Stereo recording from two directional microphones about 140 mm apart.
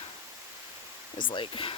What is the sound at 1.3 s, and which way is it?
Speech, 40° left (ahead or behind).